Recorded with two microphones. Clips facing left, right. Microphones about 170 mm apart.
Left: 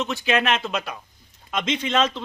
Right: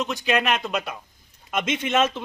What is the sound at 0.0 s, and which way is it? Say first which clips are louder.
Speech: left 1 dB; centre (ahead or behind).